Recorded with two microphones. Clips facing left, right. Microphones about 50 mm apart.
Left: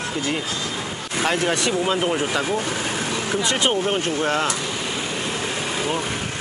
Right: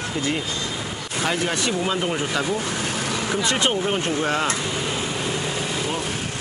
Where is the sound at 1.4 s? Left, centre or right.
Left.